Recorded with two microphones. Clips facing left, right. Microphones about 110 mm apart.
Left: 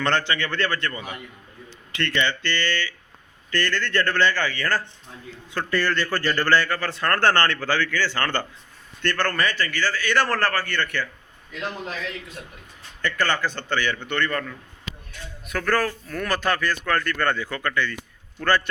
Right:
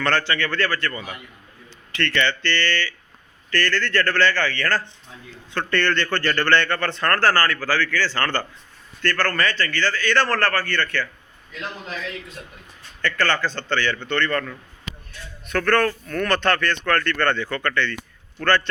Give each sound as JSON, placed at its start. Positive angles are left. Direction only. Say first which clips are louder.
{"t": 0.0, "sound": "a man's voice", "louder": "right 1 dB", "side_deg": 20}
{"t": 13.0, "sound": "a man's voice", "louder": "right 2 dB", "side_deg": 15}